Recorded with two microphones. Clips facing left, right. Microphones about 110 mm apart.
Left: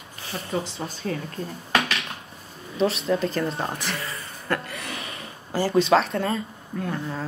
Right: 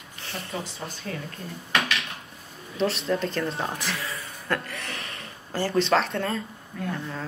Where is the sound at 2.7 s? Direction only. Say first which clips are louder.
Left 3 dB; 5° left (ahead or behind).